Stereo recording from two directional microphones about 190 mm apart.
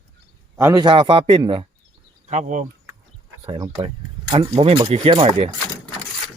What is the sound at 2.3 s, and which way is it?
Speech, 40° right (ahead or behind).